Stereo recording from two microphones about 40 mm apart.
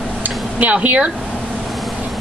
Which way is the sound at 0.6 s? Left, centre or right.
Right.